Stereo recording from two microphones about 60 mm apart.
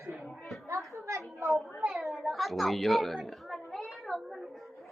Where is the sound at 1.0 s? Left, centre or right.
Right.